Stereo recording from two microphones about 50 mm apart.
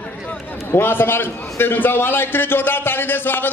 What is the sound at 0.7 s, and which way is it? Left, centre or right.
A man's voice, left.